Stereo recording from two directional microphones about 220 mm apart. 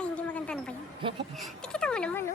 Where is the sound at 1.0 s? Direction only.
25° right (ahead or behind).